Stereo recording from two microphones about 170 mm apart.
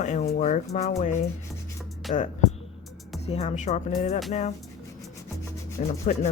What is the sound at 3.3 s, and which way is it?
Speech, 40° left (ahead or behind).